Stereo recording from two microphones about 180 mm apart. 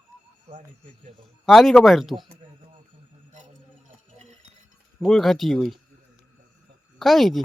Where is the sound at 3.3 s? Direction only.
45° right (ahead or behind).